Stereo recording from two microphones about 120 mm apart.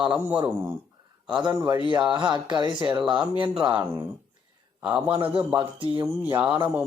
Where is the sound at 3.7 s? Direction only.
15° right (ahead or behind).